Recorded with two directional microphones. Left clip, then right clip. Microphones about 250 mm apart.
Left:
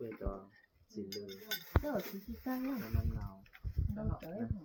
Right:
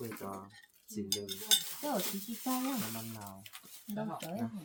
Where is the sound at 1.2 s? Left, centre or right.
Right.